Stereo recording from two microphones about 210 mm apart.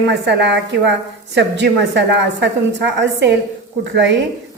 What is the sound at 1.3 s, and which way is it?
A woman's voice, 55° right (ahead or behind).